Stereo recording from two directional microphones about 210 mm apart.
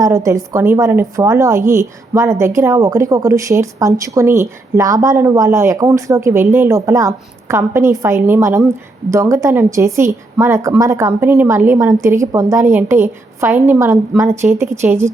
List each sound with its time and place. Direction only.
0.0 s a woman's voice: 15° right (ahead or behind)